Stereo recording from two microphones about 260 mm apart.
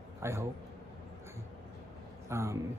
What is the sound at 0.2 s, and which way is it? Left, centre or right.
Speech, centre.